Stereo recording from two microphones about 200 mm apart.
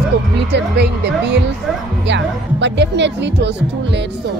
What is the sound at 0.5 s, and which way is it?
Speech, 55° right (ahead or behind).